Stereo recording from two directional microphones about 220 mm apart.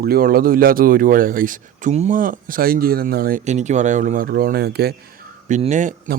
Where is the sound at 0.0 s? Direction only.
45° right (ahead or behind).